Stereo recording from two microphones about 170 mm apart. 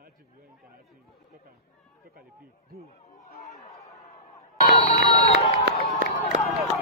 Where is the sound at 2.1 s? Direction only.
60° right (ahead or behind).